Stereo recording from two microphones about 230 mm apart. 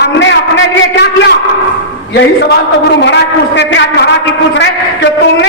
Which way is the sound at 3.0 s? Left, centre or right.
Left.